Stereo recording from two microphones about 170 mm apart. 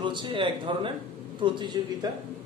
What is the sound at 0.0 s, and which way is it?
A man's voice, 25° right (ahead or behind).